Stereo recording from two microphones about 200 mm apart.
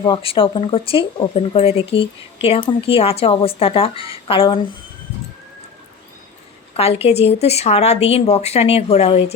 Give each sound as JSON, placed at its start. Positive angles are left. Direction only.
{"t": 0.0, "sound": "speech", "side_deg": 25}
{"t": 6.7, "sound": "speech", "side_deg": 30}